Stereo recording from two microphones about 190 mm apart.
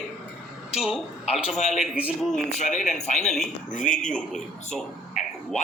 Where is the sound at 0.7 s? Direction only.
5° right (ahead or behind).